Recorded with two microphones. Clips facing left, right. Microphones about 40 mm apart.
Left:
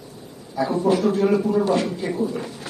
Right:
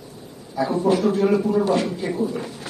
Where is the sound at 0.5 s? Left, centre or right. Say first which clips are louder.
Even; centre.